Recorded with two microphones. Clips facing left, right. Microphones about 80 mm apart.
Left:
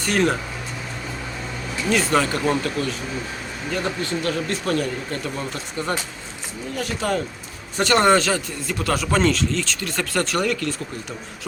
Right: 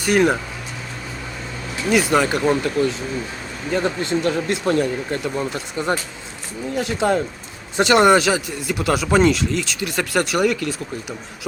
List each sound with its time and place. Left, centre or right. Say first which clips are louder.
0.0 s speech: right 4 dB; centre
1.9 s speech: right 3 dB; centre
2.8 s speech: right 5 dB; right; by 10.8 s centre